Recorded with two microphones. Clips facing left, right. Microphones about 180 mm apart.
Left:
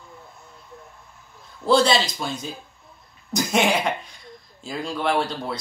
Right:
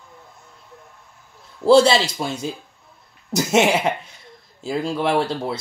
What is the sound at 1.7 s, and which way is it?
Speech, 30° right (ahead or behind).